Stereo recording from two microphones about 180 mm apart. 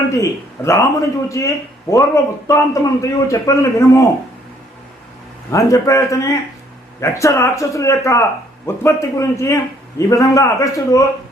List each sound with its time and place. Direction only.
0.1 s a man's voice: 15° left (ahead or behind)
5.5 s a man's voice: 20° left (ahead or behind)